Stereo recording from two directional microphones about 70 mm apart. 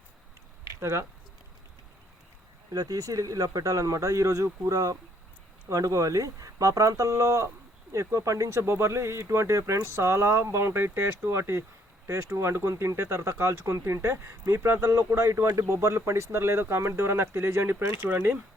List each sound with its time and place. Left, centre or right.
0.8 s speech: right
2.7 s speech: right
12.7 s speech: right
13.0 s speech: right
15.4 s speech: right